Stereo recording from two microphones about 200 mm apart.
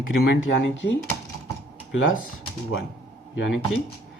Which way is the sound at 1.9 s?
75° left (ahead or behind).